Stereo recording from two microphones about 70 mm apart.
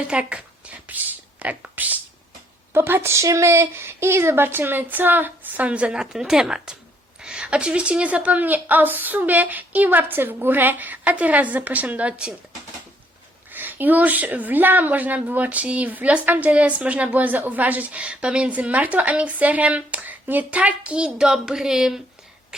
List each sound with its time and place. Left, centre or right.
0.1 s a woman's voice: centre
13.5 s a sound: right
14.3 s a woman's voice: right; by 22.0 s centre